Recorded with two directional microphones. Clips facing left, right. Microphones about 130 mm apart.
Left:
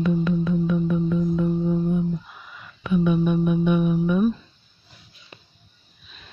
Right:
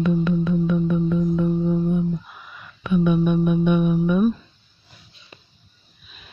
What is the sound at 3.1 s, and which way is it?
Speech, 60° right (ahead or behind).